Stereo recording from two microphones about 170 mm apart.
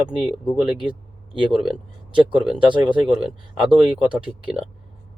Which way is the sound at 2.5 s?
30° right (ahead or behind).